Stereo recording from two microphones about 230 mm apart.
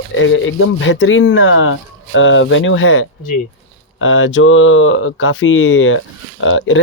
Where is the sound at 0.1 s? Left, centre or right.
Left.